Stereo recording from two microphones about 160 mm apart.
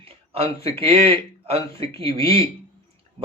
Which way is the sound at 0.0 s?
35° right (ahead or behind).